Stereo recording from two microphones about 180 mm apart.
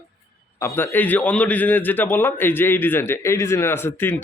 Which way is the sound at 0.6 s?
10° left (ahead or behind).